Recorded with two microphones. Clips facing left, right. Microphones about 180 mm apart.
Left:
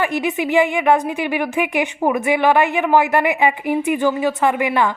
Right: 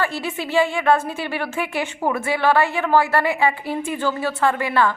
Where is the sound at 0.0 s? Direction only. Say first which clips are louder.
Left 5 dB; 15° left (ahead or behind).